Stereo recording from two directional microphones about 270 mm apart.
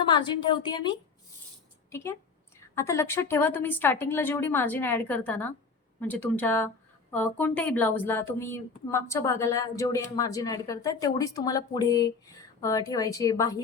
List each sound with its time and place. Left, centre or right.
0.0 s speech: centre
2.7 s speech: centre